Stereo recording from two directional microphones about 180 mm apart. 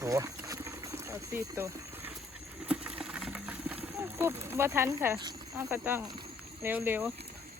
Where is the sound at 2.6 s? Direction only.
5° right (ahead or behind).